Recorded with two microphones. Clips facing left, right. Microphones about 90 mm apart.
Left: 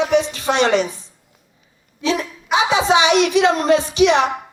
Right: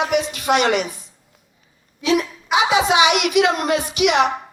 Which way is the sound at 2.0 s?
30° left (ahead or behind).